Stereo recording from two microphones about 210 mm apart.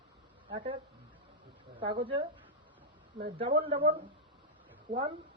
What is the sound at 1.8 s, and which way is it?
Speech, 25° right (ahead or behind).